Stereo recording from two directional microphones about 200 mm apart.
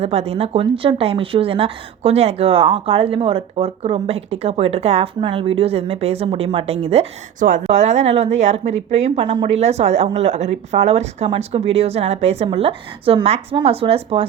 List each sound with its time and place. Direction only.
0.0 s a woman's voice: 30° right (ahead or behind)